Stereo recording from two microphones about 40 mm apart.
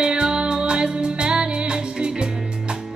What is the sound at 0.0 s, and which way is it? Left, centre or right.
Music, right.